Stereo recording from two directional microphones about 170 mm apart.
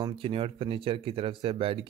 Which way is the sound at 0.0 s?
30° right (ahead or behind).